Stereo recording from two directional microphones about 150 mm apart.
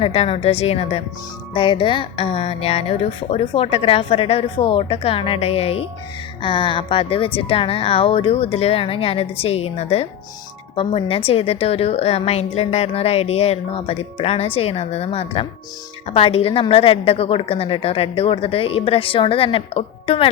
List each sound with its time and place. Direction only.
0.0 s a woman's voice: 40° left (ahead or behind)